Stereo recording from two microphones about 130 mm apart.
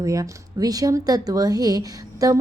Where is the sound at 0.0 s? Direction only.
30° right (ahead or behind).